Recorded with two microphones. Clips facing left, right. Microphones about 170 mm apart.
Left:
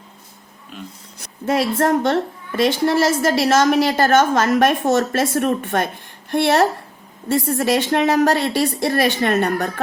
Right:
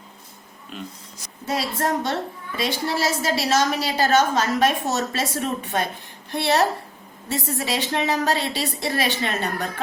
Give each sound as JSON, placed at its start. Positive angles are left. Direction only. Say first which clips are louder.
{"t": 0.7, "sound": "speech", "louder": "even", "side_deg": 0}
{"t": 1.2, "sound": "a woman's voice", "louder": "left 7 dB", "side_deg": 55}